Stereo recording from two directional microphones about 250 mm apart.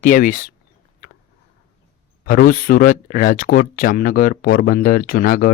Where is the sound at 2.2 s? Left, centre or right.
Left.